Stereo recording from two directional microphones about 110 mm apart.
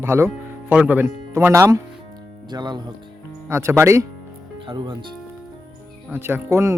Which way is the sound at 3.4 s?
25° right (ahead or behind).